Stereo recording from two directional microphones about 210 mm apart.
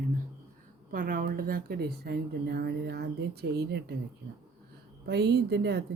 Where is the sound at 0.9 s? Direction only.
40° right (ahead or behind).